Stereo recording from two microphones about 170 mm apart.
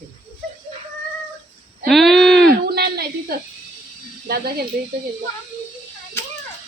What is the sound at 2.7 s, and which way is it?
Speech, 70° right (ahead or behind).